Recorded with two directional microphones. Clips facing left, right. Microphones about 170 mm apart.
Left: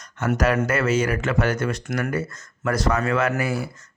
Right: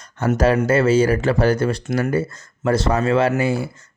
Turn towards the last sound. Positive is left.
turn(degrees=-25)  # may be behind; listen again after turning